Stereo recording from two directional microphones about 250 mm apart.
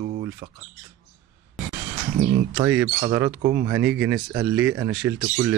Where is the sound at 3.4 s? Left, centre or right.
Right.